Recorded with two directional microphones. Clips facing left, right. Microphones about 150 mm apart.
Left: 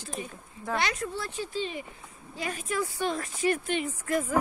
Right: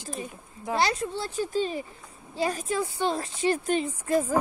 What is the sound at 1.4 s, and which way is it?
Speech, 45° right (ahead or behind).